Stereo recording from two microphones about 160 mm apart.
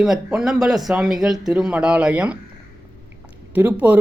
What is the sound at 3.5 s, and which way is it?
Speech, 10° right (ahead or behind).